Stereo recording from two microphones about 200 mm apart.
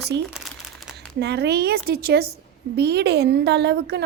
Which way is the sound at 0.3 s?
5° right (ahead or behind).